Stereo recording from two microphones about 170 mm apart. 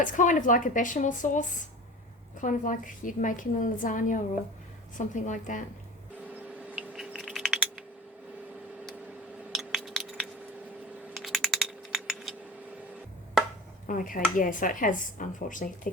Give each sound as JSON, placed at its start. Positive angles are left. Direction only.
{"t": 0.0, "sound": "speech", "side_deg": 50}
{"t": 6.7, "sound": "typing", "side_deg": -5}
{"t": 9.5, "sound": "a sound", "side_deg": 0}
{"t": 11.1, "sound": "typing", "side_deg": 0}
{"t": 13.8, "sound": "speech", "side_deg": 50}